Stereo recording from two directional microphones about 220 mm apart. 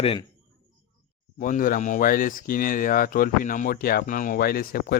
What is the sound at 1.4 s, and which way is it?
Speech, 35° left (ahead or behind).